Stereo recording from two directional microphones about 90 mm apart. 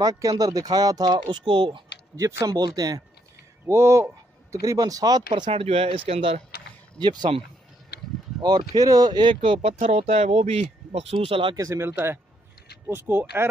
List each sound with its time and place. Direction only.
0.0 s speech: 45° right (ahead or behind); by 1.8 s 70° right (ahead or behind)
2.1 s speech: 40° right (ahead or behind)
3.6 s speech: 30° right (ahead or behind); by 5.4 s 50° right (ahead or behind)
5.6 s speech: 90° right
7.0 s speech: 55° right (ahead or behind)
8.4 s speech: 50° right (ahead or behind); by 11.5 s 90° right
11.5 s speech: 35° right (ahead or behind)